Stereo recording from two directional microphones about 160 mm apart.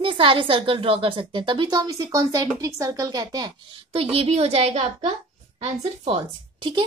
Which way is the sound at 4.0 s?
40° right (ahead or behind).